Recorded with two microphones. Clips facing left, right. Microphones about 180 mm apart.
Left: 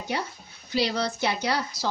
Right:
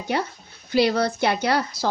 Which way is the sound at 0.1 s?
55° right (ahead or behind).